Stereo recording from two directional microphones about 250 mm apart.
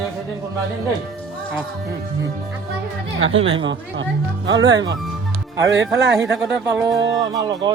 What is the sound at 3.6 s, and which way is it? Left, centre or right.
Speech, right.